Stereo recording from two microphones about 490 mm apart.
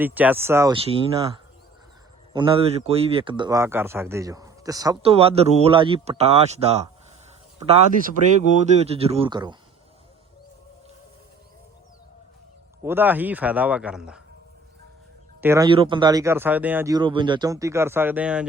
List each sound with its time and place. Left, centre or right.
0.0 s speech: centre
2.3 s speech: centre
8.4 s speech: centre
12.8 s speech: centre
15.4 s speech: centre